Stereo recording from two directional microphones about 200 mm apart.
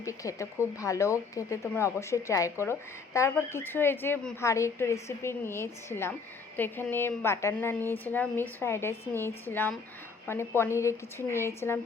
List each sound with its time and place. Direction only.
0.0 s speech: 15° left (ahead or behind)